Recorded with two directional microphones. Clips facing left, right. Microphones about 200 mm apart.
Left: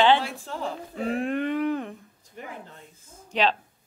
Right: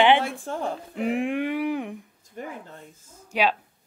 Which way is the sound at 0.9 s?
15° right (ahead or behind).